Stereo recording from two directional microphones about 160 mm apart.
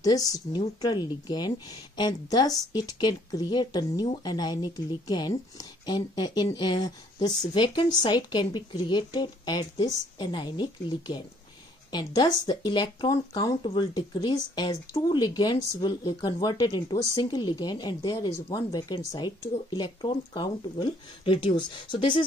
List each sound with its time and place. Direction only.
0.0 s speech: 25° left (ahead or behind)